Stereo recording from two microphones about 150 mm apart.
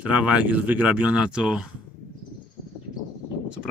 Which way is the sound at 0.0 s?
10° right (ahead or behind).